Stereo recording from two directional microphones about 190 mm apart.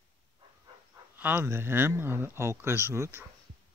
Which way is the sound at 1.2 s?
10° right (ahead or behind).